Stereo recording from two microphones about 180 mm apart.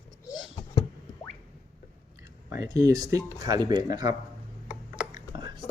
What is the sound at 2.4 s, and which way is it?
Speech, 20° right (ahead or behind).